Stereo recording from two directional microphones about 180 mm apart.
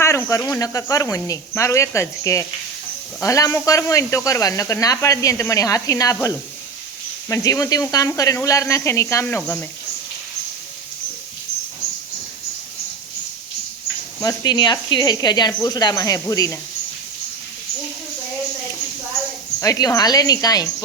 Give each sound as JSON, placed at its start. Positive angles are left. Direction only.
{"t": 0.0, "sound": "speech", "side_deg": 15}
{"t": 7.3, "sound": "speech", "side_deg": 15}
{"t": 14.2, "sound": "speech", "side_deg": 20}
{"t": 19.5, "sound": "speech", "side_deg": 15}